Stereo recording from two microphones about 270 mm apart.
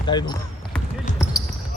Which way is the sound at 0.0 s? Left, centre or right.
Centre.